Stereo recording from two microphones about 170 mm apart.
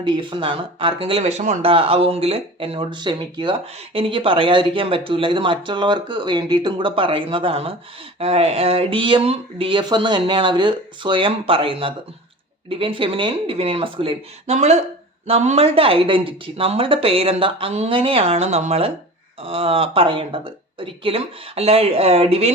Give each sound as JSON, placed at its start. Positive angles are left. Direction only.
{"t": 0.0, "sound": "speech", "side_deg": -30}